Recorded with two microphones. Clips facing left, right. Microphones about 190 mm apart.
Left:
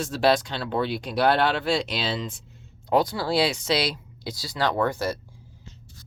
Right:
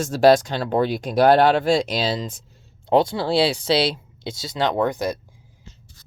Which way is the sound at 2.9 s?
25° right (ahead or behind).